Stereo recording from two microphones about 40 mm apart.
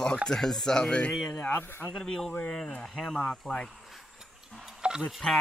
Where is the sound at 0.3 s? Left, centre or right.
Centre.